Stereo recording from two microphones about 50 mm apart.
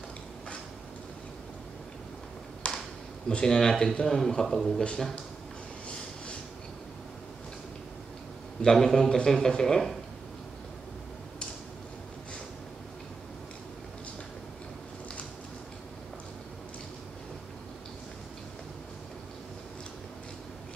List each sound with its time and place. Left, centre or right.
2.6 s a sound: left
3.3 s a man's voice: centre
8.6 s a man's voice: centre